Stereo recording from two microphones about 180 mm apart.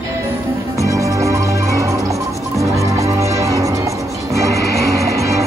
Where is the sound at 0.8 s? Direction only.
20° right (ahead or behind).